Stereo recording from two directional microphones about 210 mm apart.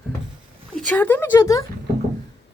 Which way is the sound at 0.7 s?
5° left (ahead or behind).